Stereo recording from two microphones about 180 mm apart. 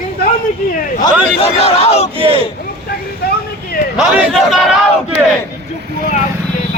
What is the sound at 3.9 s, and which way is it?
Battle cry, 5° right (ahead or behind).